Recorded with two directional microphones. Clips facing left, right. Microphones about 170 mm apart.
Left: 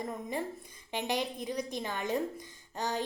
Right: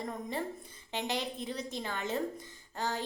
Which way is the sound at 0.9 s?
15° left (ahead or behind).